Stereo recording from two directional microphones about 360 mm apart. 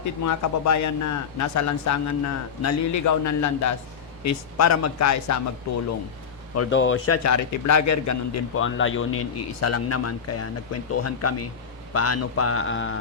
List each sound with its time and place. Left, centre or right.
0.0 s a man's voice: left
6.5 s a man's voice: left
8.5 s speech: left